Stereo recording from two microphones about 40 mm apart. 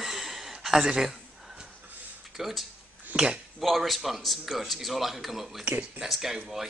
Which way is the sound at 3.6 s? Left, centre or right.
Centre.